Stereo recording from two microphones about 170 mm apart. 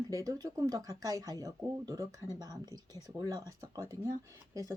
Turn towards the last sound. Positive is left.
turn(degrees=-20)  # may be behind; listen again after turning